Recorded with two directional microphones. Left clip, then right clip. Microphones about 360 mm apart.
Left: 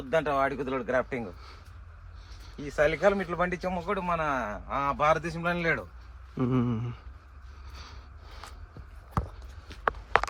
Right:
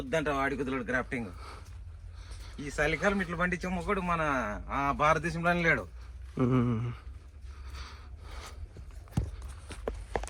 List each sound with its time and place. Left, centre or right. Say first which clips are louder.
0.1 s speech: left 4 dB; centre
2.6 s speech: left 4 dB; centre
7.7 s a sound: right 1 dB; centre